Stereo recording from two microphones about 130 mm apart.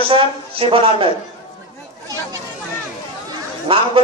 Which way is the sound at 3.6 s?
45° right (ahead or behind).